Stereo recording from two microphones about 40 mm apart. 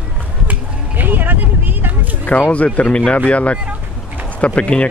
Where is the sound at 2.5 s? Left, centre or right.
Left.